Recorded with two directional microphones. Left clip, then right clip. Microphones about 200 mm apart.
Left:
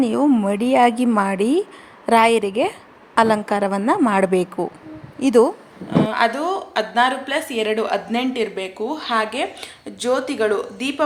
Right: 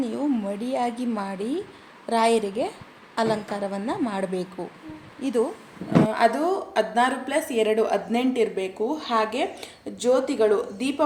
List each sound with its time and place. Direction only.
0.1 s a woman's voice: 35° left (ahead or behind)
6.1 s a woman's voice: centre (ahead or behind)